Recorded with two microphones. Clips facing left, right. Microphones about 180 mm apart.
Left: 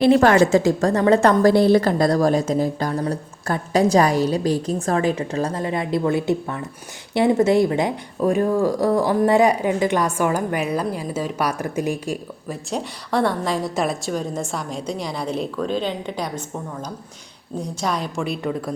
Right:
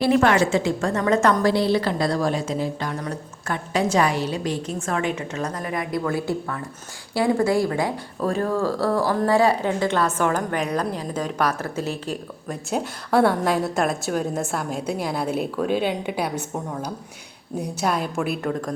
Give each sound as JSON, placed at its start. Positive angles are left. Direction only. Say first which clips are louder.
{"t": 0.2, "sound": "a woman's voice", "louder": "left 4 dB", "side_deg": 40}
{"t": 12.5, "sound": "a woman's voice", "louder": "right 1 dB", "side_deg": -5}
{"t": 17.6, "sound": "a woman's voice", "louder": "right 1 dB", "side_deg": -5}